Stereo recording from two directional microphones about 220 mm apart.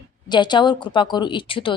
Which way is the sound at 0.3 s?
20° left (ahead or behind).